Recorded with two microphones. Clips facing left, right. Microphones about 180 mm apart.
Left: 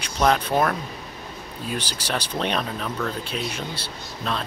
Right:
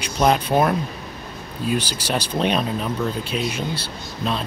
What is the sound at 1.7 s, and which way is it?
Speech, 10° right (ahead or behind).